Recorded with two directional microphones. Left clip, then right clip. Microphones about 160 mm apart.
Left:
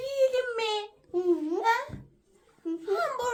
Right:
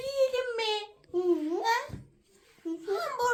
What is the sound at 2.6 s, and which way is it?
Babbling, 20° right (ahead or behind).